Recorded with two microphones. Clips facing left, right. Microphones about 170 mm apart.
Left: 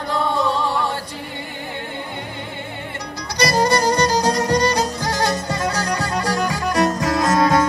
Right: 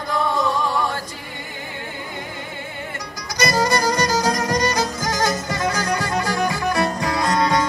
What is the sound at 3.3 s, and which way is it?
Music, 35° left (ahead or behind).